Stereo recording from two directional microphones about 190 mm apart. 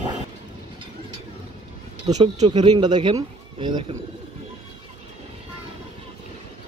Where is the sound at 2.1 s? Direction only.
20° right (ahead or behind).